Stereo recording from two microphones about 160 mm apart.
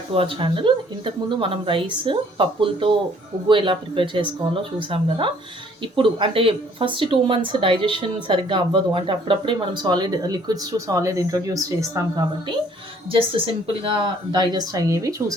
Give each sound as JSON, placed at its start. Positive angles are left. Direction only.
{"t": 0.1, "sound": "speech", "side_deg": -35}
{"t": 13.1, "sound": "speech", "side_deg": -35}